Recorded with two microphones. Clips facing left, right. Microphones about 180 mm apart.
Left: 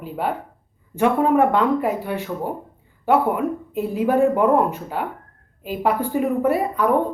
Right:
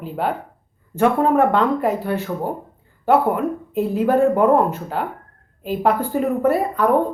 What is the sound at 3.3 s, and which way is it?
Speech, 5° left (ahead or behind).